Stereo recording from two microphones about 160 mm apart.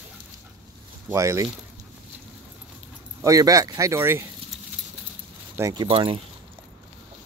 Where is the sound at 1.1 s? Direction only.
20° right (ahead or behind).